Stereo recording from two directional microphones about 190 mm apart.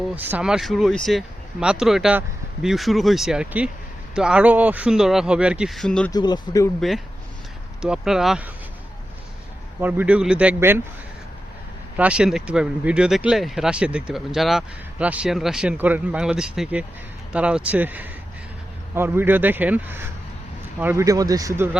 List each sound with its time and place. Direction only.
0.2 s speech: 10° right (ahead or behind)
6.1 s speech: 20° left (ahead or behind)
6.7 s speech: centre (ahead or behind)
9.8 s a man's voice: 10° right (ahead or behind)
11.9 s a man's voice: 5° right (ahead or behind)